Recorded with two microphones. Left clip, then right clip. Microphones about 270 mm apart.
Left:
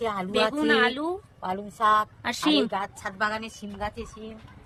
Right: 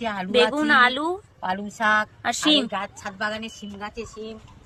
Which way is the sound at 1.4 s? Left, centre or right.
Left.